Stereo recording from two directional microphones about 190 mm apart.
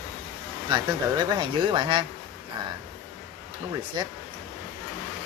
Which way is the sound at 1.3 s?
25° right (ahead or behind).